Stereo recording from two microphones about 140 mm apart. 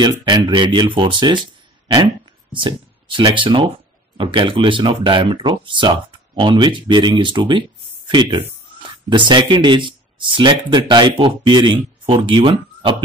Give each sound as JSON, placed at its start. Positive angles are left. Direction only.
{"t": 0.0, "sound": "speech", "side_deg": -35}
{"t": 2.6, "sound": "speech", "side_deg": -35}